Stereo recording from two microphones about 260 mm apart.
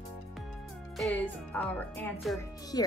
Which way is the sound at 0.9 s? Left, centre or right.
Centre.